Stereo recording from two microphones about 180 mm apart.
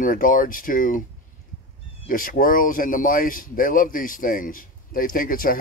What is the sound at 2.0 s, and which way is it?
Speech, 50° left (ahead or behind).